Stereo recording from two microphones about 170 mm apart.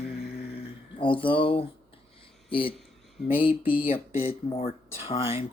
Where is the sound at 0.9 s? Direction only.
30° left (ahead or behind).